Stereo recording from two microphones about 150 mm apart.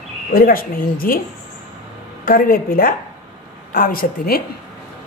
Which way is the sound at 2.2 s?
70° left (ahead or behind).